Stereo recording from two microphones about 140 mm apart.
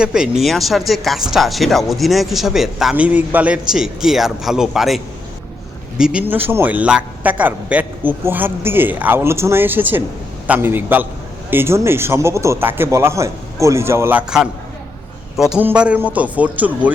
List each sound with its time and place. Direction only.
0.0 s speech: 5° right (ahead or behind)
6.0 s speech: 5° right (ahead or behind)
15.6 s speech: 10° right (ahead or behind)